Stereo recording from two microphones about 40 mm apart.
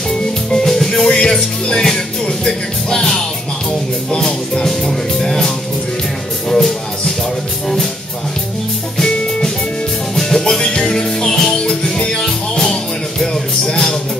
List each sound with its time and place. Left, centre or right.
0.5 s music: centre
4.1 s speech: centre
6.5 s music: centre
8.9 s music: centre